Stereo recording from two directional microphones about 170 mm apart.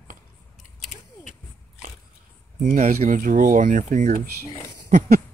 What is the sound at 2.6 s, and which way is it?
Speech, 45° right (ahead or behind).